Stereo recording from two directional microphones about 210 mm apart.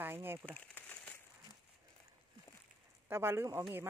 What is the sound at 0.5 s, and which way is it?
Speech, 5° left (ahead or behind).